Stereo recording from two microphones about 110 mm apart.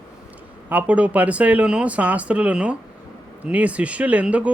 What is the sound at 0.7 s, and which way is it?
Speech, 15° right (ahead or behind).